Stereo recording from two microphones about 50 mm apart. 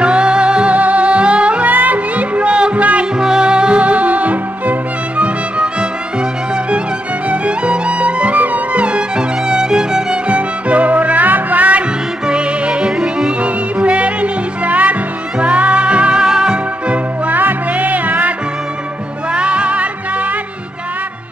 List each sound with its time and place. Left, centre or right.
0.0 s music: centre
1.7 s music: right
3.2 s music: centre
7.2 s music: right
12.3 s music: right
16.9 s music: right
19.3 s music: right